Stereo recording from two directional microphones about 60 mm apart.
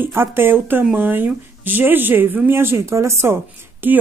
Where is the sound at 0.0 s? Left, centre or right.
Right.